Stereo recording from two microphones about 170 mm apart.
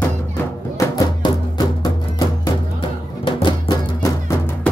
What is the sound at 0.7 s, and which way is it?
Music, 20° left (ahead or behind).